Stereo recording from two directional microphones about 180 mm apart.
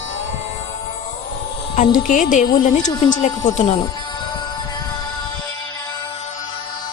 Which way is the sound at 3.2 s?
40° left (ahead or behind).